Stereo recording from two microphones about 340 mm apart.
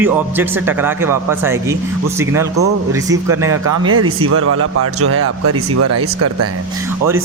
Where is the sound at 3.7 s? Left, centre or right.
Right.